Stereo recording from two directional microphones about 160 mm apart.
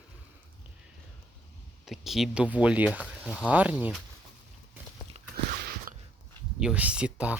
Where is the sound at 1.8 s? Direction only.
Centre (ahead or behind).